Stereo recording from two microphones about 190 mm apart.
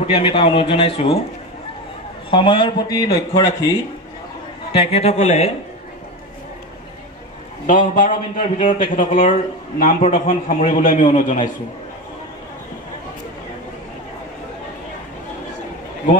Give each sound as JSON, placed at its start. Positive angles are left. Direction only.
{"t": 0.0, "sound": "a man's voice", "side_deg": 25}
{"t": 2.3, "sound": "a man's voice", "side_deg": 25}
{"t": 4.7, "sound": "a man's voice", "side_deg": 30}
{"t": 7.6, "sound": "a man's voice", "side_deg": 45}